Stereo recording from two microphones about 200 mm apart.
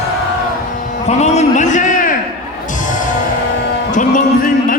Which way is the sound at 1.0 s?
35° left (ahead or behind).